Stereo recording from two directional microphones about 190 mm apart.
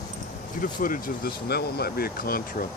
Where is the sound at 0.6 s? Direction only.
45° left (ahead or behind).